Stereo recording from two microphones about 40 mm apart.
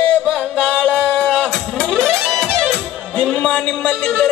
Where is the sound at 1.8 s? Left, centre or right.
Centre.